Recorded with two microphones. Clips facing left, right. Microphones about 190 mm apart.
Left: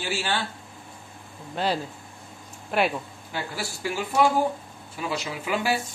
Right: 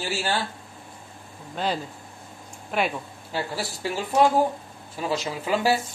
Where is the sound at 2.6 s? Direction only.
5° left (ahead or behind).